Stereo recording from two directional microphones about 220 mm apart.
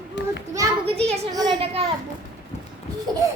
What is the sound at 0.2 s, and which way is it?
Children playing, 50° left (ahead or behind).